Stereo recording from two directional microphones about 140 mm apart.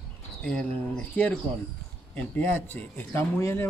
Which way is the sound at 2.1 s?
10° left (ahead or behind).